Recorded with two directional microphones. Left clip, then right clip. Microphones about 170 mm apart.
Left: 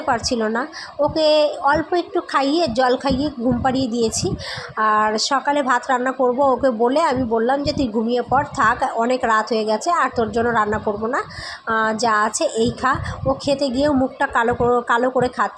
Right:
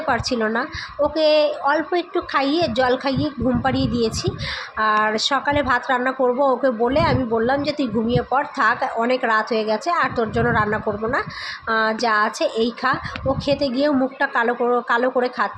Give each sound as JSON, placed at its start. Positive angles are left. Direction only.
{"t": 0.0, "sound": "a woman's voice", "side_deg": 15}